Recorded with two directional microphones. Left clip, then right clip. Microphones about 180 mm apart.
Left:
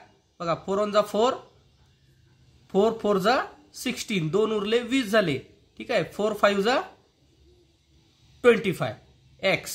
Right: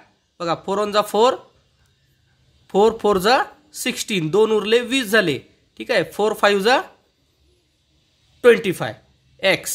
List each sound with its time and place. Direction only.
0.4 s speech: 40° right (ahead or behind)
2.6 s speech: 40° right (ahead or behind)
8.4 s speech: 35° right (ahead or behind)